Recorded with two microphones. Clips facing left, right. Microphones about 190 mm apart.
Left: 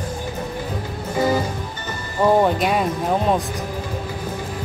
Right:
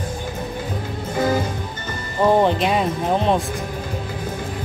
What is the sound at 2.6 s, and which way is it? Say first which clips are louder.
Speech: even; 5° left (ahead or behind).